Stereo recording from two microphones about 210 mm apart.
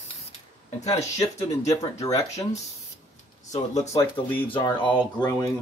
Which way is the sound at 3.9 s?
20° left (ahead or behind).